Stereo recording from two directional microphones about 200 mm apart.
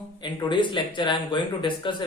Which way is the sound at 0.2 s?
25° left (ahead or behind).